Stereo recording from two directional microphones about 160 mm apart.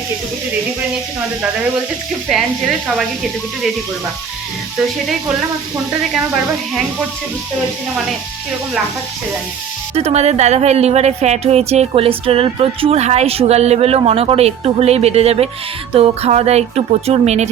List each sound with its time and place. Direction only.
9.9 s a woman's voice: 40° right (ahead or behind)